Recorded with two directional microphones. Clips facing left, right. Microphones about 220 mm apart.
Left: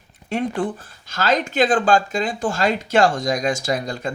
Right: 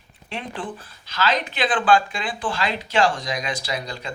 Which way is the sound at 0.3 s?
45° left (ahead or behind).